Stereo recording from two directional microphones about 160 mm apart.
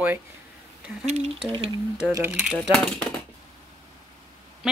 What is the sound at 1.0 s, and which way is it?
Speech, 40° right (ahead or behind).